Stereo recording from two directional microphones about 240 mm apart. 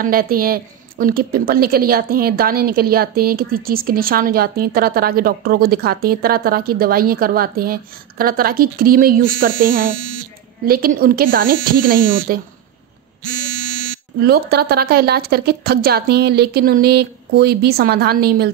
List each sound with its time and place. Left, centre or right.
0.0 s a woman's voice: right
14.2 s a woman's voice: right